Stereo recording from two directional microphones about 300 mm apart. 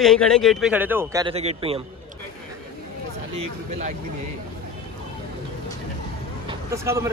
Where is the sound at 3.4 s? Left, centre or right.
Right.